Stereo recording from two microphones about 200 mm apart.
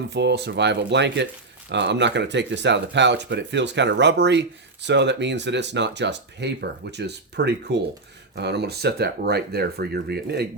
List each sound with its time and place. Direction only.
0.1 s speech: 60° right (ahead or behind)